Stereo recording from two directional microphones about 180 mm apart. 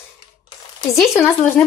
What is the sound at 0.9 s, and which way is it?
Speech, centre (ahead or behind).